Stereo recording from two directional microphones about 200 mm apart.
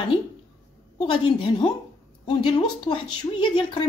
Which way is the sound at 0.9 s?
30° left (ahead or behind).